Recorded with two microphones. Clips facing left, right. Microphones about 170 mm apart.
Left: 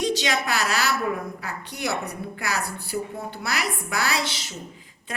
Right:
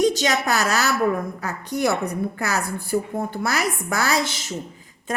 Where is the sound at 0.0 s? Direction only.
45° right (ahead or behind).